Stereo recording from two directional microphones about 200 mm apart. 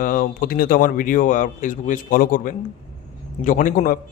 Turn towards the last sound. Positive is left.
turn(degrees=40)  # may be behind; listen again after turning